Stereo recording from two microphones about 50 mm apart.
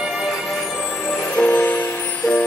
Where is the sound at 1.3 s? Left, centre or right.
Left.